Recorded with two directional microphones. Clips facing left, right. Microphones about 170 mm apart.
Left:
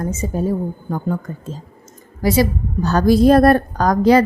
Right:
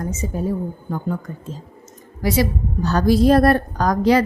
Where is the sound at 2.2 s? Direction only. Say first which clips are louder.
Left 3 dB; 40° left (ahead or behind).